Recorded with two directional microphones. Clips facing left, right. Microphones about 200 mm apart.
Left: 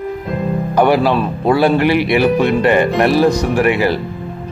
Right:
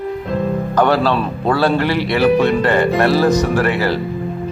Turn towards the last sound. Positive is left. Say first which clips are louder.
# left 2 dB
turn(degrees=15)  # may be behind; listen again after turning